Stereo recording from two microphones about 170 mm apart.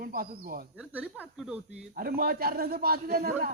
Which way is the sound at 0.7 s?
10° right (ahead or behind).